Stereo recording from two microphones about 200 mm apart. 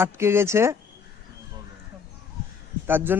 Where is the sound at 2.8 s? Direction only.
10° right (ahead or behind).